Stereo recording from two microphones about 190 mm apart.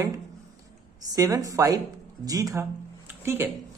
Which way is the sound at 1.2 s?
20° right (ahead or behind).